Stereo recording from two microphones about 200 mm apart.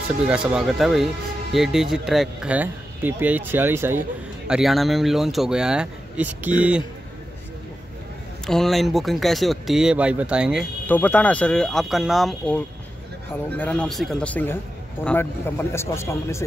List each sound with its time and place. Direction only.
0.3 s speech: 5° right (ahead or behind)
8.5 s speech: centre (ahead or behind)
10.9 s speech: 10° left (ahead or behind)